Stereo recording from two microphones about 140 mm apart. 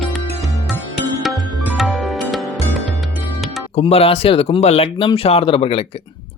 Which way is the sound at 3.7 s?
45° left (ahead or behind).